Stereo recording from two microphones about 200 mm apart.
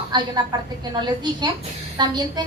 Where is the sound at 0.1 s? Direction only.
20° right (ahead or behind).